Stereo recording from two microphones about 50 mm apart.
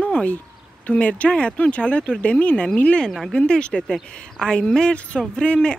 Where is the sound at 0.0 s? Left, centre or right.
Left.